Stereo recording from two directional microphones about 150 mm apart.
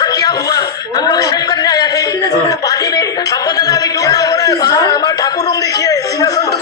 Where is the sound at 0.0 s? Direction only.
25° left (ahead or behind).